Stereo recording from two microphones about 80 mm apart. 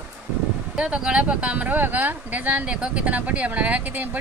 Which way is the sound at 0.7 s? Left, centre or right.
Centre.